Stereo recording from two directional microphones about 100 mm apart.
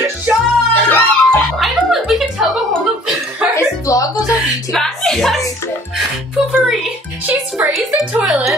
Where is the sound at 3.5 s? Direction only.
30° left (ahead or behind).